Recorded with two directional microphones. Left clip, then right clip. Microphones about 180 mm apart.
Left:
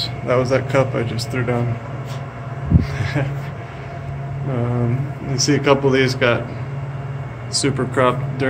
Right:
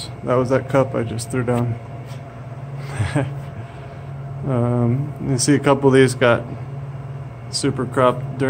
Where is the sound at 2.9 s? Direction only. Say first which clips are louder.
Even; 50° right (ahead or behind).